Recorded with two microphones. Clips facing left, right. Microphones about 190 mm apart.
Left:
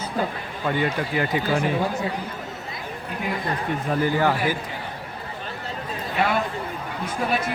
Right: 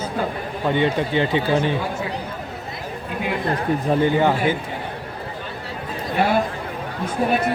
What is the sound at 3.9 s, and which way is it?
Speech, 20° right (ahead or behind).